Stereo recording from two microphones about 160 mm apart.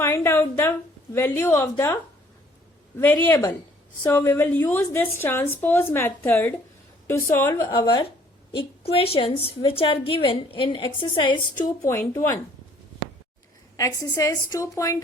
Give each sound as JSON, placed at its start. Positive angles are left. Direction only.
{"t": 0.0, "sound": "a sound", "side_deg": 15}
{"t": 1.1, "sound": "a woman's voice", "side_deg": 15}
{"t": 3.0, "sound": "a woman's voice", "side_deg": 10}
{"t": 8.5, "sound": "a woman's voice", "side_deg": 35}
{"t": 11.5, "sound": "a woman's voice", "side_deg": 15}
{"t": 13.7, "sound": "a woman's voice", "side_deg": 20}